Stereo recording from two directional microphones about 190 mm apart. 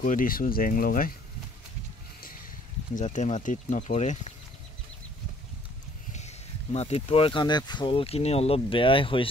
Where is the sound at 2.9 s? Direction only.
40° left (ahead or behind).